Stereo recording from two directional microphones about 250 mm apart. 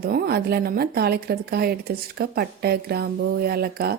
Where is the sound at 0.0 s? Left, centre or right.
Right.